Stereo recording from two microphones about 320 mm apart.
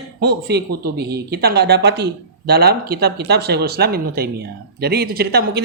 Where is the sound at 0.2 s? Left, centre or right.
Right.